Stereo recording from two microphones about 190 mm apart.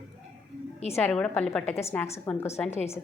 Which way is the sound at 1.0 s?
5° left (ahead or behind).